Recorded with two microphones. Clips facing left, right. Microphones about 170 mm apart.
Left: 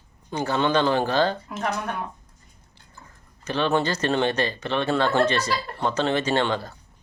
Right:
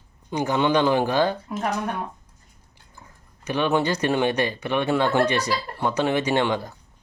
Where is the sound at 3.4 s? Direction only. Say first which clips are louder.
Right 1 dB; 15° right (ahead or behind).